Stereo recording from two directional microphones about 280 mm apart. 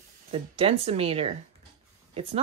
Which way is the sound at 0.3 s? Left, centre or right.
Centre.